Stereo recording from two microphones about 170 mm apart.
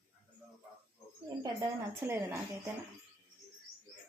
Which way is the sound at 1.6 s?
15° right (ahead or behind).